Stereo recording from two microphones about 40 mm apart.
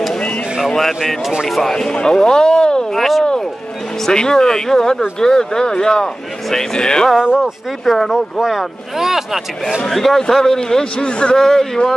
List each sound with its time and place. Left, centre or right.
0.7 s a man's voice: centre
2.9 s speech: centre
4.1 s a man's voice: centre
7.8 s speech: centre
9.8 s a man's voice: centre; by 11.3 s left
11.3 s a man's voice: centre